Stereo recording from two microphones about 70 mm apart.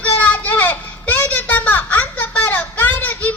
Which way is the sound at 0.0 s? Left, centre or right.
Left.